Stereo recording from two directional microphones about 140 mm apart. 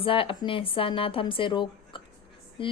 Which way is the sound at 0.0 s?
40° left (ahead or behind).